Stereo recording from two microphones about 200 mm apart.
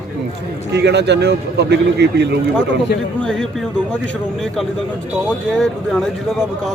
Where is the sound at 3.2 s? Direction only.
5° left (ahead or behind).